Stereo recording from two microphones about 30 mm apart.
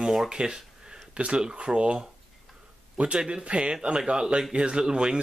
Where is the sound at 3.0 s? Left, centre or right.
Right.